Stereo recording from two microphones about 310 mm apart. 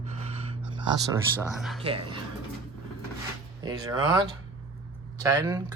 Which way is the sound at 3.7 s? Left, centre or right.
Centre.